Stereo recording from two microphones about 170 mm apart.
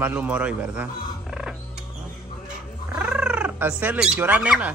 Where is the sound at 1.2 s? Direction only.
Centre (ahead or behind).